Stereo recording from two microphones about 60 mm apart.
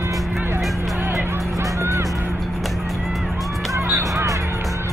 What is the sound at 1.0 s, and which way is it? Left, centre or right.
Music, right.